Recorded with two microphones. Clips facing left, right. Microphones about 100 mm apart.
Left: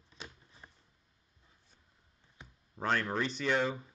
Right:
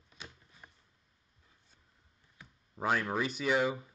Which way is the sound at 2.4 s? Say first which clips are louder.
Left 1 dB; 25° left (ahead or behind).